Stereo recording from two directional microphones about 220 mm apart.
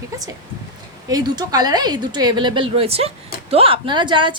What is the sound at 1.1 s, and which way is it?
Speech, 20° right (ahead or behind).